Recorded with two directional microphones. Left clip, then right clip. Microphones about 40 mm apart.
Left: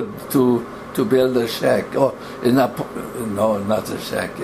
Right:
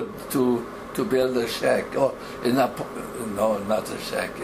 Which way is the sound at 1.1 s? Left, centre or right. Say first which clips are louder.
Left 5 dB; left.